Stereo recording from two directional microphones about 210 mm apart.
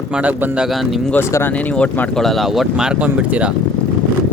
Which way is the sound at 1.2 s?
10° left (ahead or behind).